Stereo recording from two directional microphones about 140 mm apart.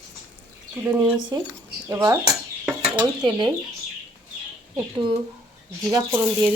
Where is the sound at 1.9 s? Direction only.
20° right (ahead or behind).